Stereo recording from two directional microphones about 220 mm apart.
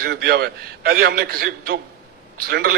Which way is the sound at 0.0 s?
45° right (ahead or behind).